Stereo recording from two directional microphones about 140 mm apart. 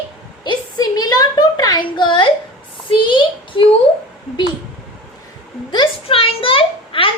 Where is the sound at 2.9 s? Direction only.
35° left (ahead or behind).